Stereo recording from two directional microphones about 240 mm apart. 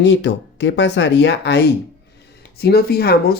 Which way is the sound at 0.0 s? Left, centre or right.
Left.